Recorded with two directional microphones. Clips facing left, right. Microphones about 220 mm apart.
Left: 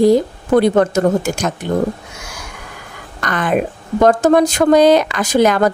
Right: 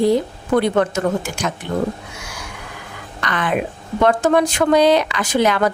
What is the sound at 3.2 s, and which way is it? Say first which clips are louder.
A woman's voice: left 4 dB; 45° left (ahead or behind).